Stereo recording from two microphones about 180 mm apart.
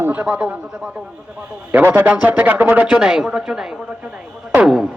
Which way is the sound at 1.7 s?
10° right (ahead or behind).